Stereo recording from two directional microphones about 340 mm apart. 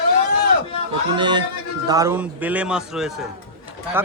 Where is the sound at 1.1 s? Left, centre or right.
Centre.